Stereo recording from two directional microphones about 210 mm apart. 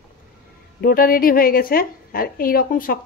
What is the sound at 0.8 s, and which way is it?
A woman's voice, 45° left (ahead or behind).